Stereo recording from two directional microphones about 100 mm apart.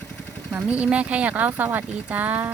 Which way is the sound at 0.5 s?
15° right (ahead or behind).